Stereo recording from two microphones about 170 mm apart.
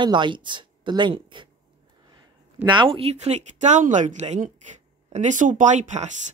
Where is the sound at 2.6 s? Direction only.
30° right (ahead or behind).